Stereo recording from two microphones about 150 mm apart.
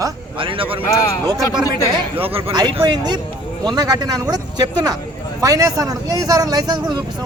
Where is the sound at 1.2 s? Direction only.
25° right (ahead or behind).